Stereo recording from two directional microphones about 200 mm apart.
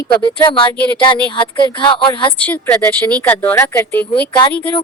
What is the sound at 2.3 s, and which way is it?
Speech, 5° left (ahead or behind).